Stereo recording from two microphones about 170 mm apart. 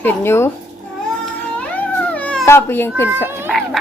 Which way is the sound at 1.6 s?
10° left (ahead or behind).